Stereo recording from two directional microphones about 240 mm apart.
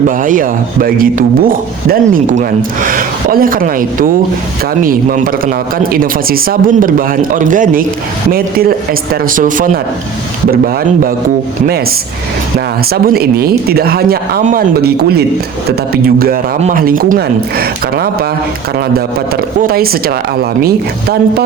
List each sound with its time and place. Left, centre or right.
0.2 s speech: right
12.5 s speech: right
19.6 s speech: right